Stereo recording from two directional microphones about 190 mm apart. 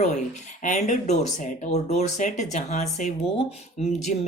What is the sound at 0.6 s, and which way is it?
Speech, 40° left (ahead or behind).